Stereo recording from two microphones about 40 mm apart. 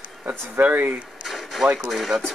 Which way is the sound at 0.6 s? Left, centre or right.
Right.